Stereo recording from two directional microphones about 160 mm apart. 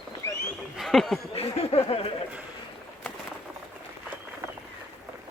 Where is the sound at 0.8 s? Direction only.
Centre (ahead or behind).